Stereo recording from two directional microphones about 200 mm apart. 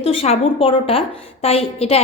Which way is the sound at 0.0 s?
30° left (ahead or behind).